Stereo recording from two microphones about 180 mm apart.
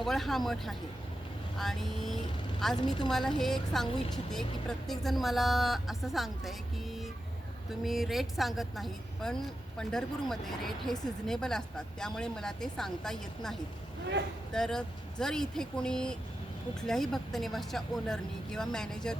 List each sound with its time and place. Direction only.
0.0 s a woman's voice: centre (ahead or behind)
2.7 s a woman's voice: 25° left (ahead or behind)
3.1 s a woman's voice: centre (ahead or behind)
7.9 s a woman's voice: centre (ahead or behind)